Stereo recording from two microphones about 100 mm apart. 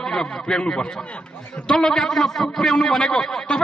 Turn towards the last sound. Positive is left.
turn(degrees=5)  # may be behind; listen again after turning